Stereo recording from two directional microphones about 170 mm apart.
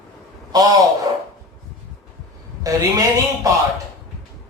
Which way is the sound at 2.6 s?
20° right (ahead or behind).